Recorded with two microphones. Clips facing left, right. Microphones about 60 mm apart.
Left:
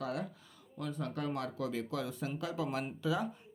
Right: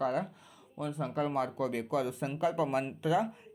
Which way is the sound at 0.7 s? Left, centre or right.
Centre.